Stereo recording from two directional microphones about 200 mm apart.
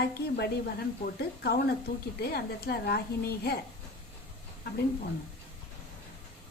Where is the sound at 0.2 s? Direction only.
55° left (ahead or behind).